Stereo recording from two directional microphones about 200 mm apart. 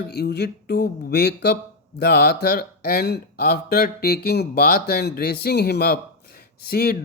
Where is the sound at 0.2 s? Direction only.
55° left (ahead or behind).